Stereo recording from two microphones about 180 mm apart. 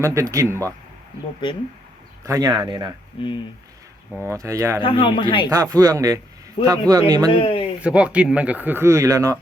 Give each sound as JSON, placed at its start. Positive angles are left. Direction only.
{"t": 0.0, "sound": "speech", "side_deg": -15}
{"t": 2.2, "sound": "speech", "side_deg": -20}
{"t": 3.2, "sound": "speech", "side_deg": 25}
{"t": 4.3, "sound": "speech", "side_deg": -15}
{"t": 4.8, "sound": "speech", "side_deg": 30}
{"t": 5.5, "sound": "speech", "side_deg": -20}
{"t": 7.3, "sound": "speech", "side_deg": 30}
{"t": 7.8, "sound": "speech", "side_deg": -5}